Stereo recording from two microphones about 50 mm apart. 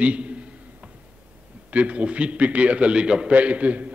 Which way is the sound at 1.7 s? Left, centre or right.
Right.